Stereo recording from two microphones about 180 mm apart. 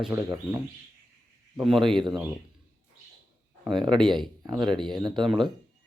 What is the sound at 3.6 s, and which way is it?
Speech, centre (ahead or behind).